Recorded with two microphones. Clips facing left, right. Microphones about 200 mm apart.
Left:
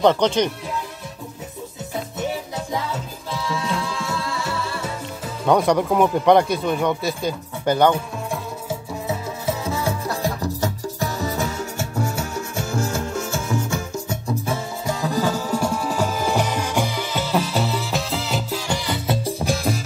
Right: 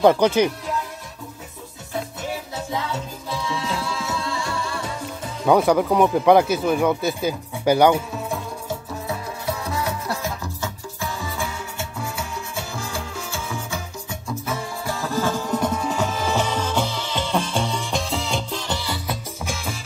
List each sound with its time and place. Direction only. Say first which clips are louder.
0.0 s speech: right 1 dB; 10° right (ahead or behind)
4.0 s music: even; centre (ahead or behind)
5.4 s speech: right 1 dB; 5° right (ahead or behind)
9.0 s music: left 5 dB; 25° left (ahead or behind)
14.9 s music: left 2 dB; 15° left (ahead or behind)
19.0 s music: left 7 dB; 35° left (ahead or behind)